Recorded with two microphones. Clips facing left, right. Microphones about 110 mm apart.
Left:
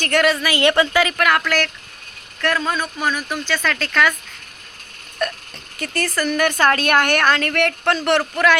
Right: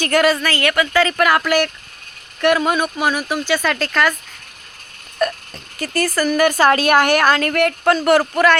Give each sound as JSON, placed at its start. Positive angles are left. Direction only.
{"t": 0.0, "sound": "a woman's voice", "side_deg": -5}
{"t": 0.4, "sound": "speech", "side_deg": 15}
{"t": 1.1, "sound": "speech", "side_deg": -5}
{"t": 5.2, "sound": "a woman's voice", "side_deg": -5}